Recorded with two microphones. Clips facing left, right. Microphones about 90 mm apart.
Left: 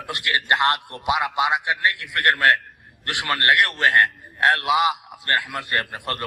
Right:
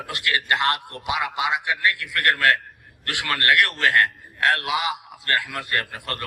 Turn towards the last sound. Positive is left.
turn(degrees=25)  # may be behind; listen again after turning